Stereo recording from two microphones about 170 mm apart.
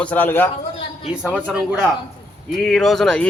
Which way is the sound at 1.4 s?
5° right (ahead or behind).